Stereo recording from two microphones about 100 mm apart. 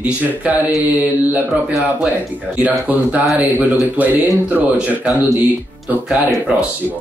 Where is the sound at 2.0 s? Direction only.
15° right (ahead or behind).